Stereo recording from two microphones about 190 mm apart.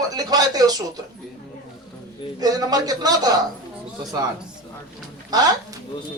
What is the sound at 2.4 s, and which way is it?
A man's voice, 20° right (ahead or behind).